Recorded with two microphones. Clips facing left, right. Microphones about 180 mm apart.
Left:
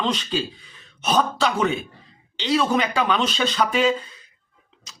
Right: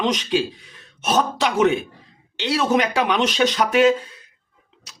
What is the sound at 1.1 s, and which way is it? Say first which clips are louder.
Speech: right 1 dB; 10° right (ahead or behind).